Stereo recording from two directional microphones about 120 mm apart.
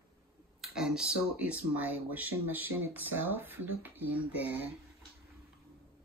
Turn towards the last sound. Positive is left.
turn(degrees=-15)  # may be behind; listen again after turning